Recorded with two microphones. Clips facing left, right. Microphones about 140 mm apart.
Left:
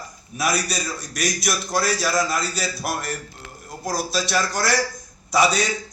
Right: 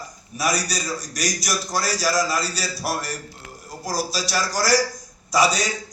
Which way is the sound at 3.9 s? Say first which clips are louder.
Left 1 dB; 55° left (ahead or behind).